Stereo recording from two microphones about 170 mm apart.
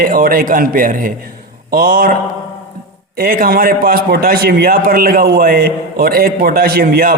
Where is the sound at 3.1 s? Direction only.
60° right (ahead or behind).